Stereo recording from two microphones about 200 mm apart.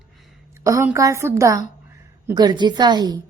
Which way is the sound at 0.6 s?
15° right (ahead or behind).